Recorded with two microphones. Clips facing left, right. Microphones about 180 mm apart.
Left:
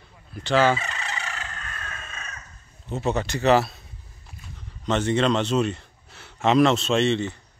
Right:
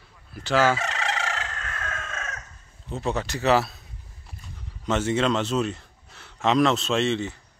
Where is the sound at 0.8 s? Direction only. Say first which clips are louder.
Right 5 dB; 90° right.